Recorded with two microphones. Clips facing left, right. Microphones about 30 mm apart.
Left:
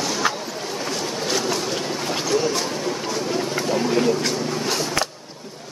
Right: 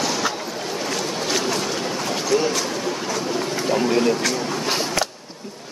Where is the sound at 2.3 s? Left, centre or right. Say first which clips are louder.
Right 2 dB; centre.